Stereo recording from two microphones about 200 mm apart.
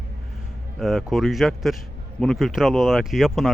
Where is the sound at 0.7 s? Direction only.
Centre (ahead or behind).